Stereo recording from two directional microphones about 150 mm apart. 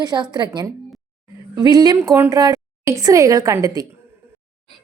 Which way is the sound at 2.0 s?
15° right (ahead or behind).